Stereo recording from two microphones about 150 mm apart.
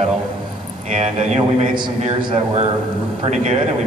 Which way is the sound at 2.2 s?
35° right (ahead or behind).